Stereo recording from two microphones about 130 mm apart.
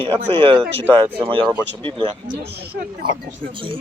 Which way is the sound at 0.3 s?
40° right (ahead or behind).